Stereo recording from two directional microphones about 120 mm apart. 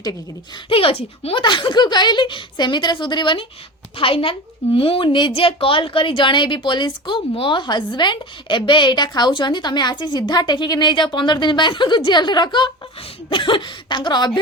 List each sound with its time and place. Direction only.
0.7 s a child's voice: 50° left (ahead or behind)